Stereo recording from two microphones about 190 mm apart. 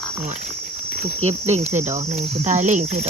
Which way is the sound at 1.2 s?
35° right (ahead or behind).